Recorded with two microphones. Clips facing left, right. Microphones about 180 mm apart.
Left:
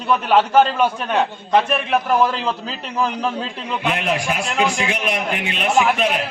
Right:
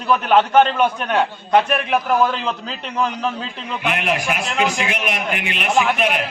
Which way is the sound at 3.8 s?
25° left (ahead or behind).